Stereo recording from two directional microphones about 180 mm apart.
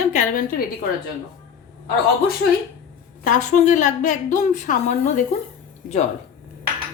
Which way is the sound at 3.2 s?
45° left (ahead or behind).